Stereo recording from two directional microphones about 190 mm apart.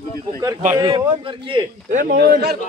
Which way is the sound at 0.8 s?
25° right (ahead or behind).